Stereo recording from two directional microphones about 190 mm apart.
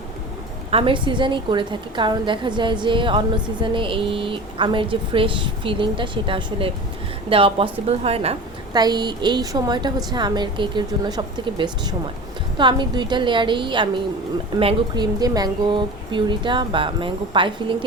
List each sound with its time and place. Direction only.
0.7 s a woman's voice: 30° right (ahead or behind)